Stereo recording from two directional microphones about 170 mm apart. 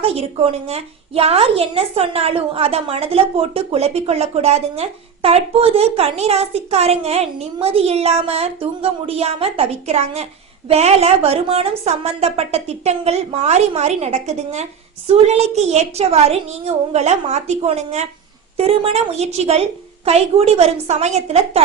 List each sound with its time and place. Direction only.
0.0 s a woman's voice: 35° right (ahead or behind)